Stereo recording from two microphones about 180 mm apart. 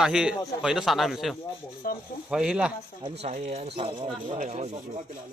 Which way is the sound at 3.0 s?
30° right (ahead or behind).